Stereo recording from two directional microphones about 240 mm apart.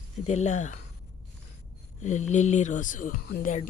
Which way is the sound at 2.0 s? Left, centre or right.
Left.